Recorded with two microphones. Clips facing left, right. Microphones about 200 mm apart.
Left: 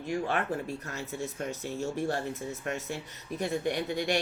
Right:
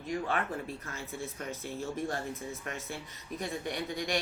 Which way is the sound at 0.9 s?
75° left (ahead or behind).